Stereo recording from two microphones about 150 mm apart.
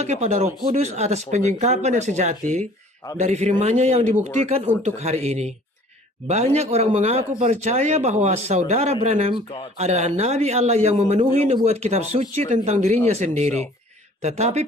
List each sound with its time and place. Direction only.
0.0 s speech: 45° right (ahead or behind)